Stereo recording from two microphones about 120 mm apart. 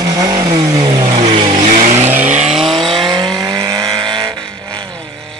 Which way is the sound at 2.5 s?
Centre (ahead or behind).